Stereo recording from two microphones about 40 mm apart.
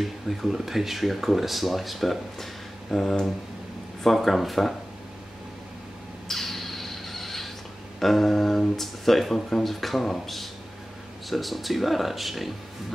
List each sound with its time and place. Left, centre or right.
0.0 s speech: centre
6.2 s a sound: centre
8.0 s speech: centre